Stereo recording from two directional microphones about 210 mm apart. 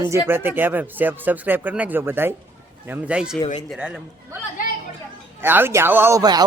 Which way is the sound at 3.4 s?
20° left (ahead or behind).